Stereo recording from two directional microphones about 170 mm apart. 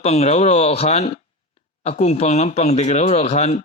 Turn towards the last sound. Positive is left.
turn(degrees=40)  # may be behind; listen again after turning